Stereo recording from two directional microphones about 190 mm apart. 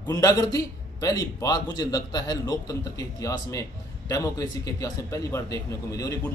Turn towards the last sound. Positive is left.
turn(degrees=15)  # may be behind; listen again after turning